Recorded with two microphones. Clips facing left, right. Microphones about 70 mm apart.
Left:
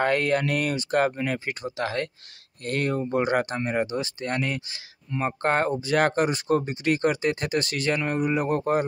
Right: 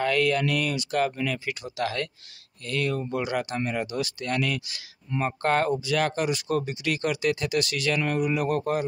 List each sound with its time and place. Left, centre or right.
0.0 s speech: left
2.6 s speech: left
5.1 s speech: centre
5.4 s speech: left
5.8 s speech: left